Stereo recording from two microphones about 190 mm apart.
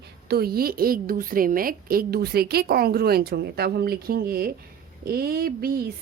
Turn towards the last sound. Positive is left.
turn(degrees=-50)  # may be behind; listen again after turning